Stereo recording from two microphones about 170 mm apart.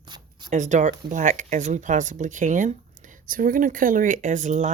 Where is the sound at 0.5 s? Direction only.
45° right (ahead or behind).